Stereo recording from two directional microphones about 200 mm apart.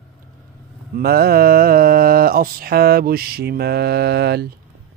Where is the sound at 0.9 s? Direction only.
50° right (ahead or behind).